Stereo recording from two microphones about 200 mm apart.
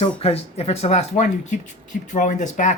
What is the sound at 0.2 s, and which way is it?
Speech, 30° left (ahead or behind).